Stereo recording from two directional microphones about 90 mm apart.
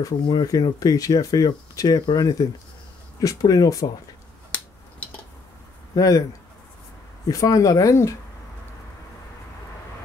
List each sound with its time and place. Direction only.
0.0 s speech: 45° left (ahead or behind)
5.9 s speech: 45° left (ahead or behind)
7.2 s speech: 40° left (ahead or behind)